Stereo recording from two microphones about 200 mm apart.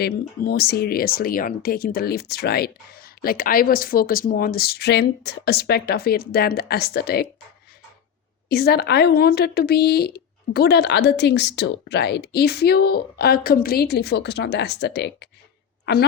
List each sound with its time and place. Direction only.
0.0 s speech: 50° left (ahead or behind)
8.4 s speech: 50° left (ahead or behind)